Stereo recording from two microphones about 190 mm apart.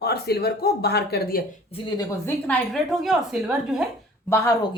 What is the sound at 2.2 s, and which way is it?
A woman's voice, 5° left (ahead or behind).